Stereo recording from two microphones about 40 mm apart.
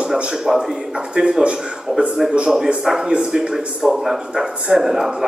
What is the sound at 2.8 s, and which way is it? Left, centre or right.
A man's voice, centre.